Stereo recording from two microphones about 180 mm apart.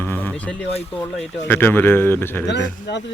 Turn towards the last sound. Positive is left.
turn(degrees=75)  # may be behind; listen again after turning